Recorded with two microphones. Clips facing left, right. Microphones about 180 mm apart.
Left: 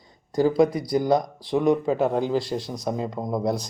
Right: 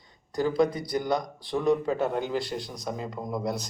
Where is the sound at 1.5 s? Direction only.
20° left (ahead or behind).